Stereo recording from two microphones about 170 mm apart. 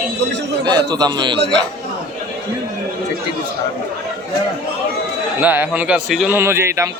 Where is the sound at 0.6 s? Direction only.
25° right (ahead or behind).